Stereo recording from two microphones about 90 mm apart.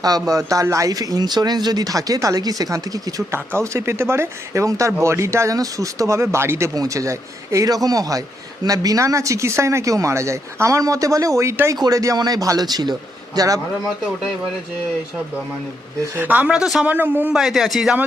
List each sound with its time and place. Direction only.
0.0 s speech: 45° right (ahead or behind)
3.3 s a man's voice: 30° right (ahead or behind)
16.1 s speech: 20° right (ahead or behind)
16.8 s a man's voice: 20° right (ahead or behind)
17.3 s a man's voice: 5° right (ahead or behind)